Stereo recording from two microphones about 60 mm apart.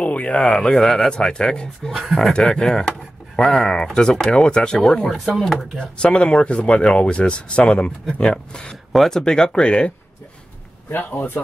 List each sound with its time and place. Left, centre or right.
0.0 s a sound: left
0.5 s speech: centre
5.1 s speech: centre
5.8 s speech: centre
8.9 s speech: centre
9.2 s speech: centre
10.9 s a man's voice: left